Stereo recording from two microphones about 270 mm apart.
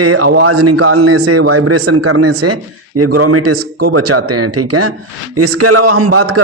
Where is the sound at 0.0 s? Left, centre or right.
Right.